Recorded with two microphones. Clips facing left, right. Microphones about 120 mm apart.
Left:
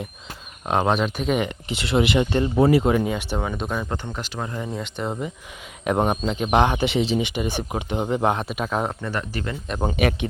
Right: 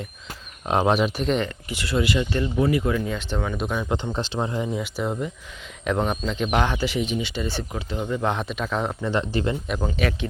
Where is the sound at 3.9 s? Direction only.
20° right (ahead or behind); by 5.1 s 5° right (ahead or behind).